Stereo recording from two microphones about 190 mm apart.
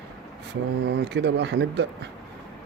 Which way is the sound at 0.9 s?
65° right (ahead or behind).